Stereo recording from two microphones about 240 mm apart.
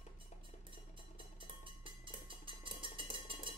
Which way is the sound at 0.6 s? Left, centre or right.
Right.